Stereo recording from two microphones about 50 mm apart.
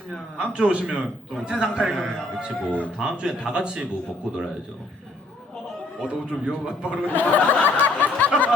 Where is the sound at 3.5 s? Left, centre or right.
Centre.